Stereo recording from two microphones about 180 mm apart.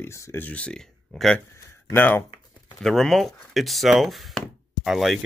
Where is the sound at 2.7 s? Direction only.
Centre (ahead or behind).